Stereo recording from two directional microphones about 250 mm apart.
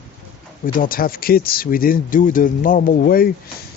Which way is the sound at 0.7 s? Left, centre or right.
Left.